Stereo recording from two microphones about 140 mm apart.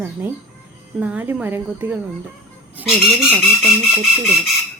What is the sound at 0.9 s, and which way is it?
Speech, 10° right (ahead or behind).